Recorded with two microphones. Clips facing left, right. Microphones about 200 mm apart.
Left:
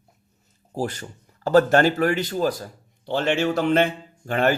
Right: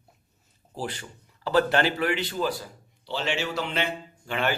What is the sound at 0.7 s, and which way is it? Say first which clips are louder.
A man's voice: left 6 dB; 45° left (ahead or behind).